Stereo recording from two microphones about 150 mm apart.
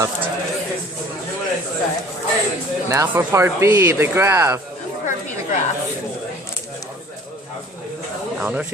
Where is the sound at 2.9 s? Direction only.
20° right (ahead or behind).